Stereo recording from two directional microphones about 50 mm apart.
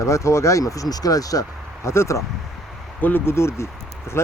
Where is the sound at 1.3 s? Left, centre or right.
Left.